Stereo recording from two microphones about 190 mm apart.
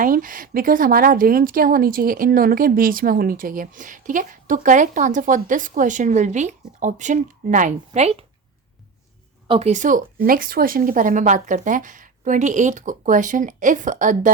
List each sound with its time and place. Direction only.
0.0 s speech: 45° right (ahead or behind)
9.5 s speech: 35° right (ahead or behind)